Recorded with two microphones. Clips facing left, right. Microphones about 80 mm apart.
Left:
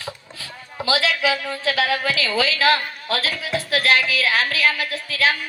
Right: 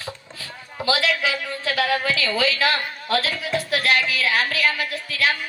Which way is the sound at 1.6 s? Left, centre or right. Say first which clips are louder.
Left 1 dB; right.